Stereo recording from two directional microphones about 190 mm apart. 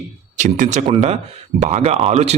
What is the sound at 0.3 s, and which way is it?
Speech, 40° right (ahead or behind).